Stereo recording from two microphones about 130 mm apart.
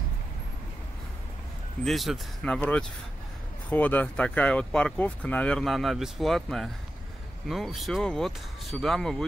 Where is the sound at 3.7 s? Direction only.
15° left (ahead or behind).